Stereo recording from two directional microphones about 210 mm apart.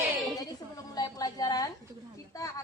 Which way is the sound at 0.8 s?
20° left (ahead or behind).